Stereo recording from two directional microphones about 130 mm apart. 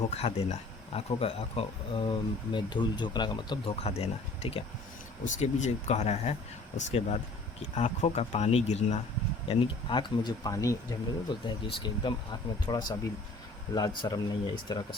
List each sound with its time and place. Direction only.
0.1 s speech: 50° left (ahead or behind); by 3.6 s 35° left (ahead or behind)
3.7 s speech: 50° left (ahead or behind)
5.2 s speech: 65° left (ahead or behind)
9.5 s speech: 35° left (ahead or behind)